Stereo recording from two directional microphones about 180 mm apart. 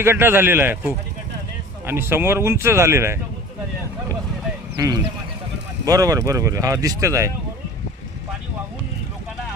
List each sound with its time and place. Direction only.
0.0 s speech: 15° right (ahead or behind)
5.8 s speech: 20° right (ahead or behind)